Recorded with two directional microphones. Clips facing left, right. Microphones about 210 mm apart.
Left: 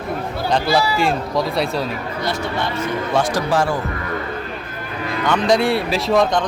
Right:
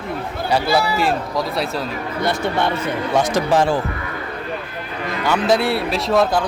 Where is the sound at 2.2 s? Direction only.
55° right (ahead or behind).